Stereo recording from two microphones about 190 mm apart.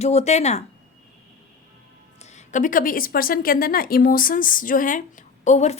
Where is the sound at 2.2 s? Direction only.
35° left (ahead or behind).